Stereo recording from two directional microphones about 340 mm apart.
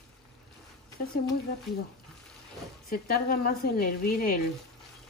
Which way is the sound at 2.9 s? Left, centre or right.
Left.